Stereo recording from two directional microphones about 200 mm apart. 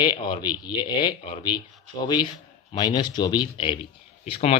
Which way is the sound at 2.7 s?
20° left (ahead or behind).